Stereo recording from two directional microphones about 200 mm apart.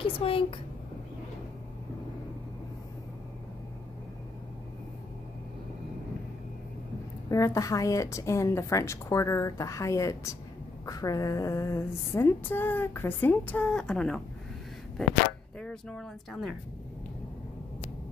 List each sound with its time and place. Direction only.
0.0 s a woman's voice: 25° left (ahead or behind)
7.2 s a sound: 15° left (ahead or behind)
15.6 s speech: 5° left (ahead or behind)